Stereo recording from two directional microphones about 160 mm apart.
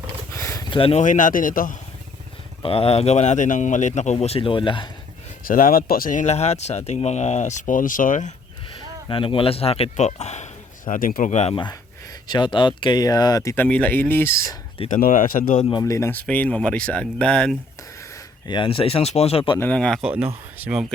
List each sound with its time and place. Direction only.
0.3 s a sound: 20° left (ahead or behind)
0.7 s speech: 35° left (ahead or behind)
1.0 s speech: 55° left (ahead or behind)
2.6 s speech: 40° left (ahead or behind)
5.5 s speech: 60° left (ahead or behind)
9.0 s speech: 35° left (ahead or behind)
11.5 s speech: 30° left (ahead or behind); by 14.3 s 15° left (ahead or behind)
14.8 s speech: 55° left (ahead or behind)
15.7 s speech: 20° left (ahead or behind)
18.4 s speech: 30° left (ahead or behind)
19.5 s speech: 10° left (ahead or behind)
20.0 s speech: 5° right (ahead or behind)